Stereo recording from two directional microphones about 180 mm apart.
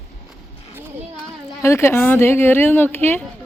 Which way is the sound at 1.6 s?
15° left (ahead or behind).